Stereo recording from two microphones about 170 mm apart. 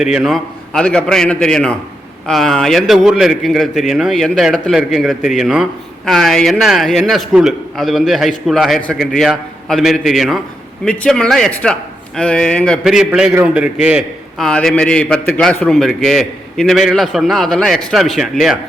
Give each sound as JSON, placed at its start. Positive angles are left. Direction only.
{"t": 0.0, "sound": "a man's voice", "side_deg": 0}